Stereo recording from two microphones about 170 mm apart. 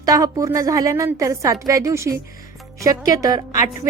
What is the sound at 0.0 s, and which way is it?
A woman's voice, 20° right (ahead or behind).